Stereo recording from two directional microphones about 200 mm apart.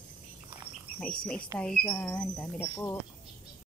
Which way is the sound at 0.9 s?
5° left (ahead or behind).